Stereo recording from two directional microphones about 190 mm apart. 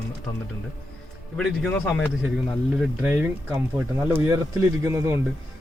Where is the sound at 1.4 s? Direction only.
5° left (ahead or behind).